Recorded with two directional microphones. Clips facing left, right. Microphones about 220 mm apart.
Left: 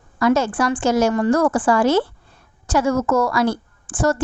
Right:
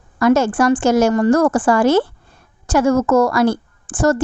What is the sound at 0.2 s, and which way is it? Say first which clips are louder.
A woman's voice: right 4 dB; 45° right (ahead or behind).